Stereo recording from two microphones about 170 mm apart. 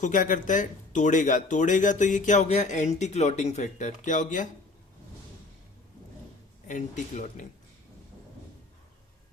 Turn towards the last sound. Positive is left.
turn(degrees=45)  # may be behind; listen again after turning